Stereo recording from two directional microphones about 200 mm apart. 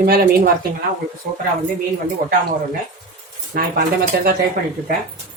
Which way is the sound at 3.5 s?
45° right (ahead or behind).